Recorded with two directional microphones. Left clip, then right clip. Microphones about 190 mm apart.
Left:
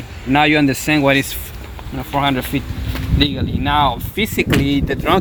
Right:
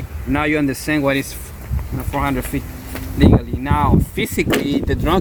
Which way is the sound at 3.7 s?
45° left (ahead or behind).